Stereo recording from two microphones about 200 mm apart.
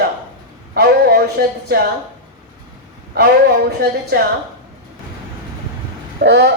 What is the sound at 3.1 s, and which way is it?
Speech, 50° right (ahead or behind).